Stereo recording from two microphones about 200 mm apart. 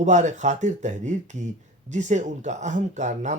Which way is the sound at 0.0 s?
35° right (ahead or behind).